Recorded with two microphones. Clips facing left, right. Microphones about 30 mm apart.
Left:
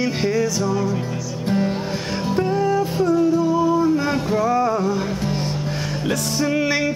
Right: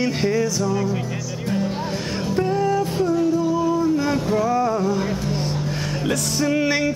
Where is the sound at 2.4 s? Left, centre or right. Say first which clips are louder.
Left 1 dB; centre.